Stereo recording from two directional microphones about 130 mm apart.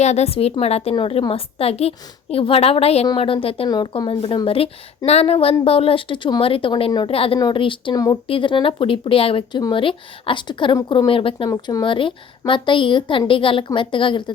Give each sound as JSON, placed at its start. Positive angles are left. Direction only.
{"t": 0.0, "sound": "a woman's voice", "side_deg": 60}
{"t": 3.7, "sound": "speech", "side_deg": 35}
{"t": 11.4, "sound": "speech", "side_deg": 30}